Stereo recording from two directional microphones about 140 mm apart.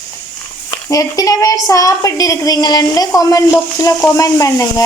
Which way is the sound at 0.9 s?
25° left (ahead or behind).